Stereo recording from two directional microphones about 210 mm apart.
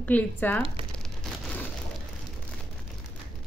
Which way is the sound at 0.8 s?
25° right (ahead or behind).